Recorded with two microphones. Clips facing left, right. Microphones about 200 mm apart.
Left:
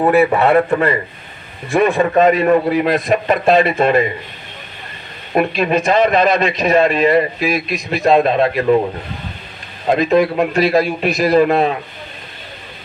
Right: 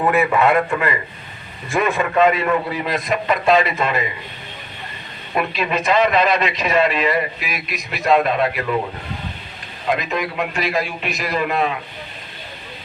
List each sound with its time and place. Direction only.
0.0 s a man's voice: 35° left (ahead or behind)
2.7 s a man's voice: 55° left (ahead or behind)
5.3 s a man's voice: 45° left (ahead or behind)
7.1 s a man's voice: 30° left (ahead or behind)
9.8 s a man's voice: 30° left (ahead or behind)